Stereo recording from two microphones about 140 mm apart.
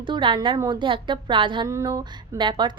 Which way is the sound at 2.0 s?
30° right (ahead or behind).